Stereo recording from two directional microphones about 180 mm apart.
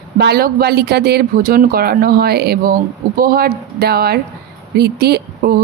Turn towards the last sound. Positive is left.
turn(degrees=-65)  # may be behind; listen again after turning